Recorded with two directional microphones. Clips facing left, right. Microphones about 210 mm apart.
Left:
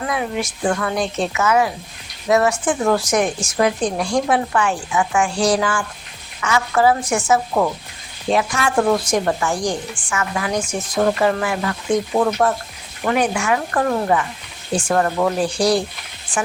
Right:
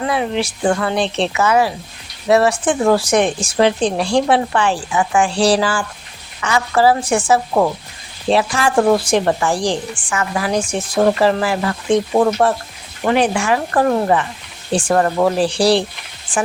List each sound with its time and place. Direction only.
0.1 s a woman's voice: 30° right (ahead or behind)